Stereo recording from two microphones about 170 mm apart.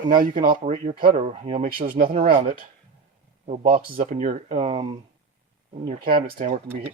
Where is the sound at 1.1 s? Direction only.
40° right (ahead or behind).